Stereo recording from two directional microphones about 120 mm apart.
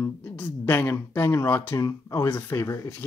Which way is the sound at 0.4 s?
15° left (ahead or behind).